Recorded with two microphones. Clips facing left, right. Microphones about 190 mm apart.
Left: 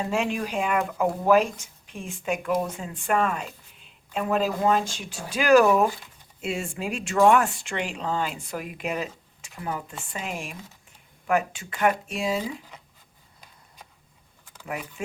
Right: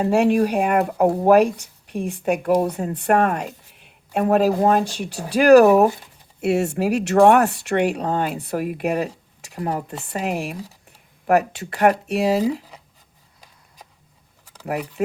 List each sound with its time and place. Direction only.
0.1 s speech: 60° right (ahead or behind)
0.8 s speech: 45° right (ahead or behind)
1.3 s speech: 60° right (ahead or behind)
2.4 s speech: 35° right (ahead or behind)
2.7 s speech: 65° right (ahead or behind)
5.6 s speech: 40° right (ahead or behind)
6.4 s speech: 70° right (ahead or behind); by 10.1 s 35° right (ahead or behind)
10.2 s speech: 65° right (ahead or behind)
10.5 s speech: 35° right (ahead or behind)
12.0 s speech: 65° right (ahead or behind)
14.5 s speech: 40° right (ahead or behind)